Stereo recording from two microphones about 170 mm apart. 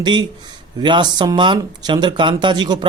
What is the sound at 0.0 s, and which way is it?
Speech, 25° right (ahead or behind).